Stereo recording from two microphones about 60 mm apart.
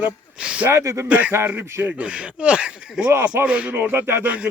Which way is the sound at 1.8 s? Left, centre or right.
Right.